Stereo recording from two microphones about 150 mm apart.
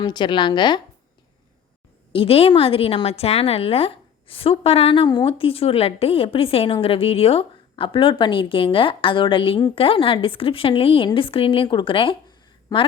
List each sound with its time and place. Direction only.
0.0 s a woman's voice: 30° left (ahead or behind)
2.1 s a woman's voice: 40° left (ahead or behind)
12.7 s a woman's voice: 25° left (ahead or behind)